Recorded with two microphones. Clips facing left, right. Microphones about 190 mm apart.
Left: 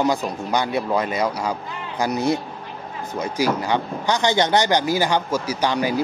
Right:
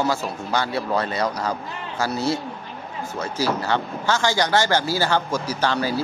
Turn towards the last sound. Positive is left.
turn(degrees=15)  # may be behind; listen again after turning